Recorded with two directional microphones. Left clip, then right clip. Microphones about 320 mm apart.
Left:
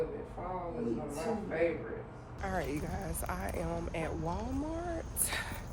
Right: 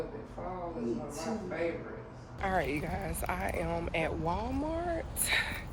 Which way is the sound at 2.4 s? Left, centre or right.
Centre.